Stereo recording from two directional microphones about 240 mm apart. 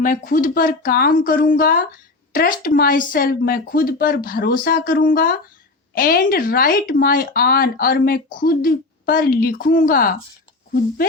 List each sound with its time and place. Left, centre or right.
0.0 s speech: left